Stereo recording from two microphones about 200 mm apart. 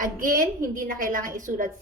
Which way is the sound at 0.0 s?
45° right (ahead or behind).